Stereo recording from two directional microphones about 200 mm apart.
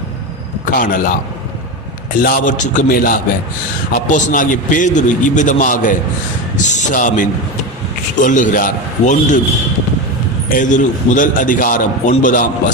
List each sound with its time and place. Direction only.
0.6 s a man's voice: 45° left (ahead or behind)
2.2 s a man's voice: 45° left (ahead or behind)
10.5 s a man's voice: 40° left (ahead or behind)